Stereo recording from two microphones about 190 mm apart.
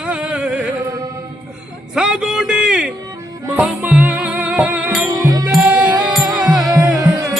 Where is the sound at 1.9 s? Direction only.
5° right (ahead or behind).